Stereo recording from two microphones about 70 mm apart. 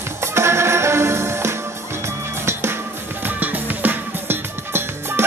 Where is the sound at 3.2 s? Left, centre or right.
Right.